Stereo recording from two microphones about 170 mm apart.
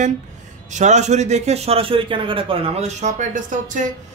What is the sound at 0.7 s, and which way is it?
A man's voice, 45° right (ahead or behind).